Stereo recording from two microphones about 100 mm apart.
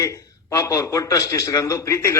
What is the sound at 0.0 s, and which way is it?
A man's voice, 30° left (ahead or behind).